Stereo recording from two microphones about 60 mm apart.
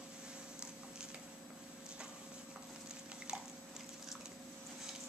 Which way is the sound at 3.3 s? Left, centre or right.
Centre.